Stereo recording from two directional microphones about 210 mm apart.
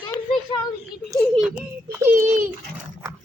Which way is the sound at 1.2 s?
Centre (ahead or behind).